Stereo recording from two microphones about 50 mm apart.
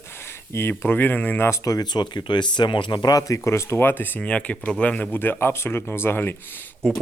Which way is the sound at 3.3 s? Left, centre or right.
Left.